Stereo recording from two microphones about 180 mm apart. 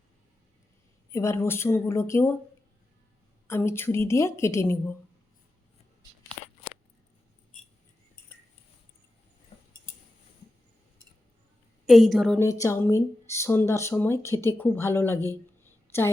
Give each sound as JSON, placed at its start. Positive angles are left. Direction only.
{"t": 1.1, "sound": "speech", "side_deg": 15}
{"t": 3.4, "sound": "speech", "side_deg": 15}
{"t": 9.5, "sound": "a sound", "side_deg": 35}
{"t": 11.9, "sound": "a woman's voice", "side_deg": 0}
{"t": 12.4, "sound": "speech", "side_deg": 15}